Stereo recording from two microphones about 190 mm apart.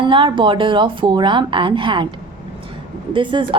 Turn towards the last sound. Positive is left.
turn(degrees=-25)  # may be behind; listen again after turning